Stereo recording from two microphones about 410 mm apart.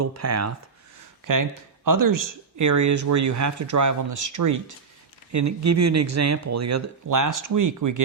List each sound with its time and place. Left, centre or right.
0.0 s speech: right
1.3 s speech: right